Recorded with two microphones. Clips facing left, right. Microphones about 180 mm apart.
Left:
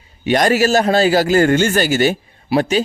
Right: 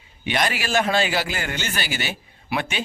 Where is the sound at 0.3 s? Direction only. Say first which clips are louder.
Left 11 dB; 45° left (ahead or behind).